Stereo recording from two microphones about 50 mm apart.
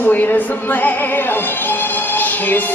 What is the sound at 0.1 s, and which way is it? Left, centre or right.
Music, left.